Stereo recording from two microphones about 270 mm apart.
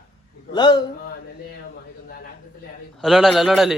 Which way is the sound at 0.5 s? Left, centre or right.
Centre.